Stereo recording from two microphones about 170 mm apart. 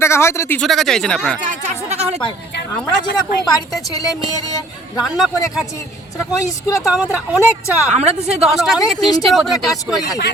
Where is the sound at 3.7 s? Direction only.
20° left (ahead or behind).